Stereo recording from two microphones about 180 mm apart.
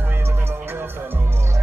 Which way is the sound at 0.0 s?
10° right (ahead or behind).